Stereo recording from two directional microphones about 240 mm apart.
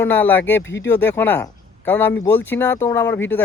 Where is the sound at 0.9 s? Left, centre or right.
Centre.